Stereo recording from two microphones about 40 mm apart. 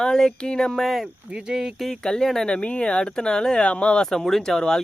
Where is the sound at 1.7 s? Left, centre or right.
Centre.